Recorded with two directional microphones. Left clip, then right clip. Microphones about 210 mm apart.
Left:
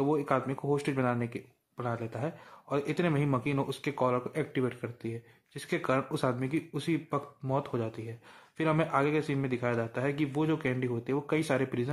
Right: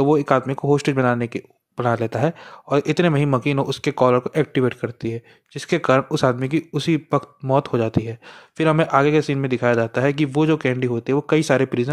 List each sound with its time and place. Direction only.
0.0 s speech: 35° right (ahead or behind)